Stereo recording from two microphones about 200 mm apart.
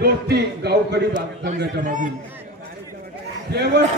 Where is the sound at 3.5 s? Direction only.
55° right (ahead or behind).